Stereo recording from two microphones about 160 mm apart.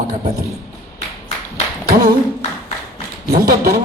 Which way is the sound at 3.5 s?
70° right (ahead or behind).